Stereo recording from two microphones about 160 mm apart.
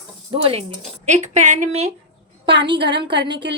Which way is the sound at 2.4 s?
30° right (ahead or behind).